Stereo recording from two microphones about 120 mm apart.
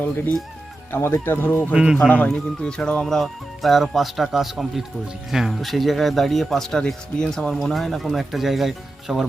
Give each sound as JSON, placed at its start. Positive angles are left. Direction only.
{"t": 0.9, "sound": "speech", "side_deg": 20}
{"t": 1.7, "sound": "speech", "side_deg": -5}
{"t": 2.0, "sound": "speech", "side_deg": 10}